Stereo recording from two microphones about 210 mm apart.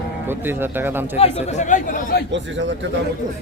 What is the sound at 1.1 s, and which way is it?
Speech, 30° left (ahead or behind).